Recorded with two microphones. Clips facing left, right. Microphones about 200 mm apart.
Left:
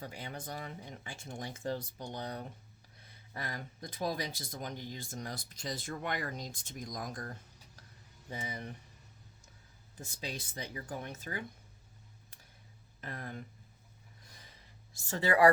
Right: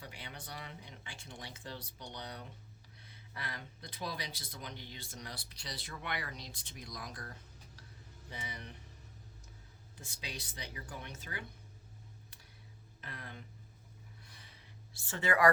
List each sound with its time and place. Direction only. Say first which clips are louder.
0.0 s speech: left 6 dB; 45° left (ahead or behind)
10.0 s speech: left 5 dB; 45° left (ahead or behind)
13.0 s speech: left 6 dB; 45° left (ahead or behind)
14.3 s gasp: left 1 dB; 40° left (ahead or behind)
14.9 s speech: left 4 dB; 40° left (ahead or behind)